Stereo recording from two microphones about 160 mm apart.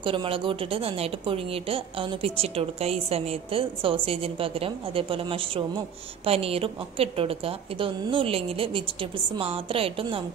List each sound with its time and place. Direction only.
0.0 s a woman's voice: 35° right (ahead or behind)